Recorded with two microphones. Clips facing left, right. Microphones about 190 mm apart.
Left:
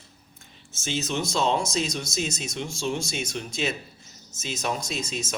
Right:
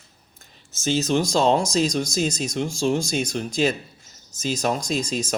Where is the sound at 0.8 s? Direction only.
40° right (ahead or behind).